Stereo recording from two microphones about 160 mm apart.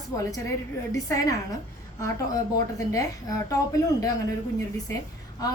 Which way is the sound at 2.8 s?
20° left (ahead or behind).